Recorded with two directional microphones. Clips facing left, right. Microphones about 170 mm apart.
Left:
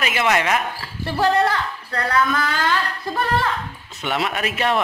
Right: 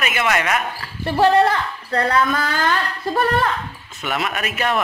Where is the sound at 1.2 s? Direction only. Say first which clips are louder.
Right 3 dB; 25° right (ahead or behind).